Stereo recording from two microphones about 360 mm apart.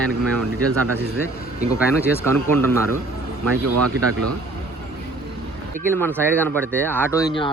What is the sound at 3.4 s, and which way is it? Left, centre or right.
Speech, right.